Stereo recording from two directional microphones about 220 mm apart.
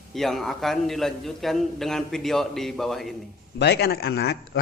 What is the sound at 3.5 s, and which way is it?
Speech, 50° left (ahead or behind).